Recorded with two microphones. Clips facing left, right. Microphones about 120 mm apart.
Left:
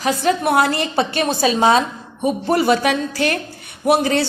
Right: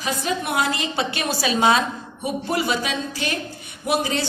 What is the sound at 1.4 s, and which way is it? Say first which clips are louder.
A woman's voice: left 3 dB; 35° left (ahead or behind).